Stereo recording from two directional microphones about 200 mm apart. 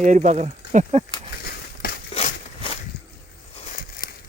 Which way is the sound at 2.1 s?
30° left (ahead or behind).